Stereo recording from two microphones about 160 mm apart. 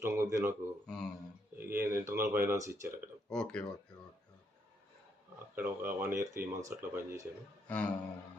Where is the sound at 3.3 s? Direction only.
5° left (ahead or behind).